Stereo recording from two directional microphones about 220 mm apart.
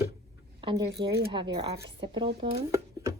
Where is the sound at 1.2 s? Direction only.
20° right (ahead or behind).